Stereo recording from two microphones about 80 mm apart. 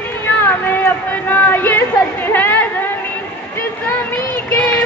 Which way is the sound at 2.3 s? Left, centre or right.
Left.